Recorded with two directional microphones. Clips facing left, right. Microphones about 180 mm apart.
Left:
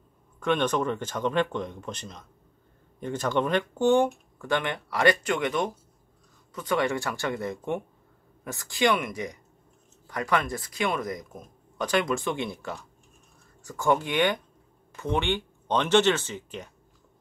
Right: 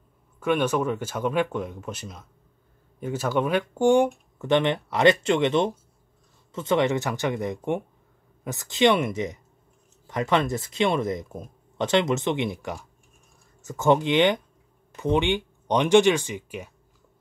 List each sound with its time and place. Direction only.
0.4 s speech: 10° right (ahead or behind)